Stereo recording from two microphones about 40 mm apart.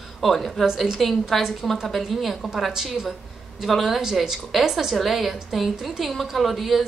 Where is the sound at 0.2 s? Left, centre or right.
Centre.